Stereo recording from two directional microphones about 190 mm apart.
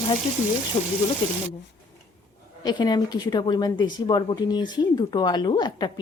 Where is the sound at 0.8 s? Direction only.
35° left (ahead or behind).